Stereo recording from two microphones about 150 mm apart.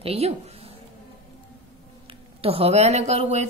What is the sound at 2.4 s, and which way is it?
A woman's voice, 40° right (ahead or behind).